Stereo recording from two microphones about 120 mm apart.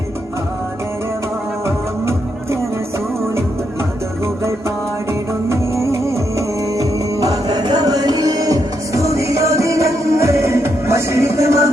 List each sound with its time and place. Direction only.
1.6 s music: 25° right (ahead or behind)
5.5 s music: 25° right (ahead or behind)